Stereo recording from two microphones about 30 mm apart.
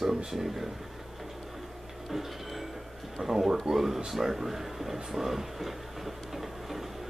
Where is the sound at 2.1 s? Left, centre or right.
Centre.